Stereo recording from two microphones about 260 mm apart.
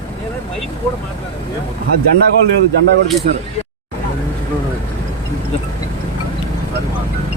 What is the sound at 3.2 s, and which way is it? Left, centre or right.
Speech, right.